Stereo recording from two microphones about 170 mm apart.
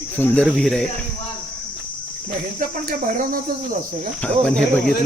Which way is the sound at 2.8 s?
55° right (ahead or behind).